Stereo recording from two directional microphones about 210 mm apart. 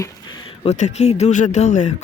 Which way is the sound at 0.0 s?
20° left (ahead or behind).